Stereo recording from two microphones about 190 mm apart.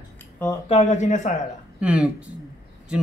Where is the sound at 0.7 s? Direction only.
35° left (ahead or behind).